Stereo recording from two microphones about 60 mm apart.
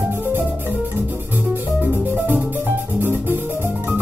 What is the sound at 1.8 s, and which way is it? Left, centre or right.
Music, right.